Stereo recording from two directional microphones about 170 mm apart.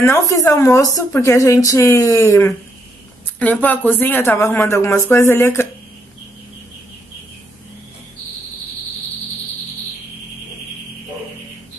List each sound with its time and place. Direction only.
0.0 s a woman's voice: 20° left (ahead or behind)